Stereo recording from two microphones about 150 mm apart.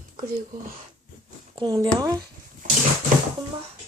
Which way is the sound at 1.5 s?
35° right (ahead or behind).